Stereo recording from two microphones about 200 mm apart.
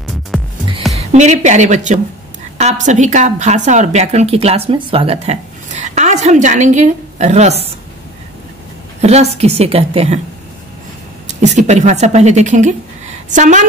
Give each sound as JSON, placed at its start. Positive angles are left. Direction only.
{"t": 0.3, "sound": "music", "side_deg": 0}
{"t": 0.9, "sound": "a woman's voice", "side_deg": -35}
{"t": 9.0, "sound": "a woman's voice", "side_deg": -35}
{"t": 11.2, "sound": "a woman's voice", "side_deg": -35}